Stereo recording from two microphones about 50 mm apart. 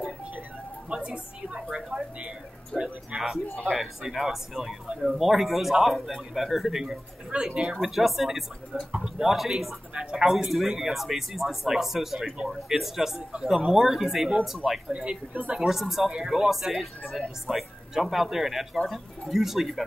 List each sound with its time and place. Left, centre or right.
0.9 s speech: centre
3.7 s a man's voice: centre
7.9 s a man's voice: centre
14.9 s speech: right
15.6 s a man's voice: centre